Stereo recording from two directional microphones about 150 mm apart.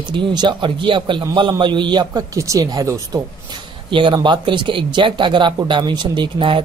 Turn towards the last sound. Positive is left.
turn(degrees=-35)  # may be behind; listen again after turning